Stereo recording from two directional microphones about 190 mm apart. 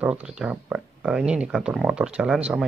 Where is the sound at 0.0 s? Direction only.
5° right (ahead or behind).